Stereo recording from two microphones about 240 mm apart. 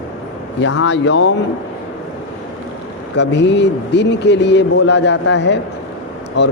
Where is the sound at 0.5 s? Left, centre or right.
Left.